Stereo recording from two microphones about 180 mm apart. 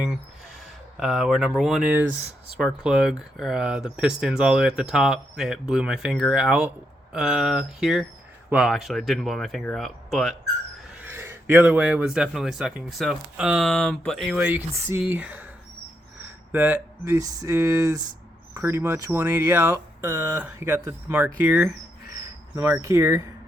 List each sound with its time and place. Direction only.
0.9 s speech: centre (ahead or behind)
11.0 s speech: 10° right (ahead or behind)
16.2 s a sound: 10° right (ahead or behind)
17.2 s speech: 20° right (ahead or behind)
22.5 s speech: 15° right (ahead or behind)